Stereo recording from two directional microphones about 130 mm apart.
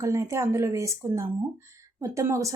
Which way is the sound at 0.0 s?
25° right (ahead or behind).